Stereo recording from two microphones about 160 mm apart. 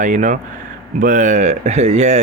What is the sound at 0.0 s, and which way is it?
A man's voice, 50° right (ahead or behind).